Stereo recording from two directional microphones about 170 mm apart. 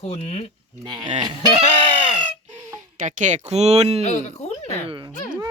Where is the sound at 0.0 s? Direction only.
40° left (ahead or behind).